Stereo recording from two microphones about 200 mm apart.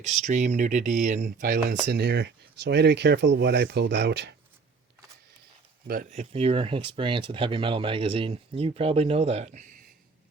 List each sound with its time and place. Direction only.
0.0 s speech: 35° right (ahead or behind); by 4.4 s 60° right (ahead or behind)
5.9 s speech: 40° right (ahead or behind)